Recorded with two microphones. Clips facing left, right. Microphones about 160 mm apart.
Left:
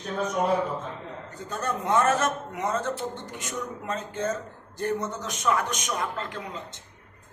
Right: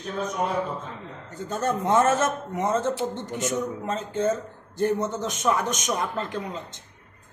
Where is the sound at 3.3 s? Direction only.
25° right (ahead or behind).